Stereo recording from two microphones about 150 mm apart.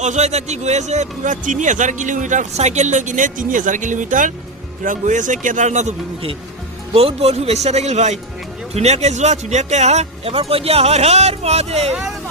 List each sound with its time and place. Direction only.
0.0 s speech: 50° right (ahead or behind)
6.9 s speech: 45° right (ahead or behind)